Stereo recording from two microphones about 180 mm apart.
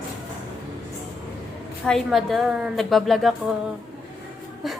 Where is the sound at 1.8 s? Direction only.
Centre (ahead or behind).